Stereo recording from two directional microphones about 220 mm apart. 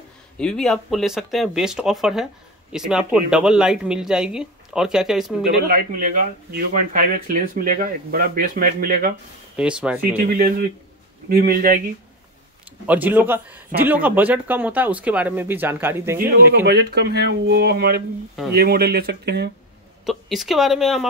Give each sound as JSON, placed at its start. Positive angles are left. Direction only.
{"t": 0.4, "sound": "speech", "side_deg": 5}
{"t": 5.7, "sound": "speech", "side_deg": -40}
{"t": 9.6, "sound": "speech", "side_deg": -5}
{"t": 11.2, "sound": "speech", "side_deg": -45}
{"t": 12.8, "sound": "speech", "side_deg": -5}
{"t": 16.2, "sound": "speech", "side_deg": -45}
{"t": 20.1, "sound": "speech", "side_deg": 0}